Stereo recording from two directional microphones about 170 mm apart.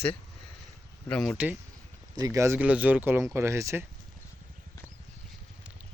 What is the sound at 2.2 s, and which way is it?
Speech, 20° right (ahead or behind).